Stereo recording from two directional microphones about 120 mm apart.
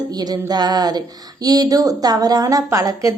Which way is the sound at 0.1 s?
35° right (ahead or behind).